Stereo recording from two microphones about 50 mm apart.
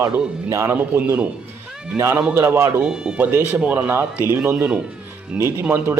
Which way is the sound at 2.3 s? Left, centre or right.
Right.